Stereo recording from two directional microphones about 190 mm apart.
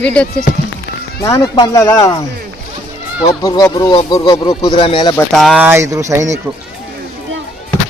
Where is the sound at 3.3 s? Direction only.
20° left (ahead or behind).